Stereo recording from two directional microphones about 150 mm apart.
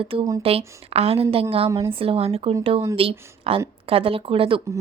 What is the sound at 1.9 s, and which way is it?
A woman's voice, 40° right (ahead or behind).